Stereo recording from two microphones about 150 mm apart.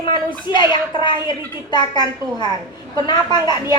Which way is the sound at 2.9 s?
30° left (ahead or behind).